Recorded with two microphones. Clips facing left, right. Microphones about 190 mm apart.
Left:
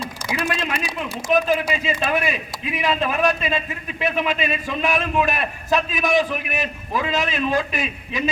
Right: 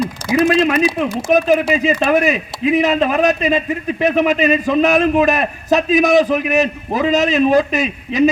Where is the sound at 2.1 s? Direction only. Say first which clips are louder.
Right 8 dB; 45° right (ahead or behind).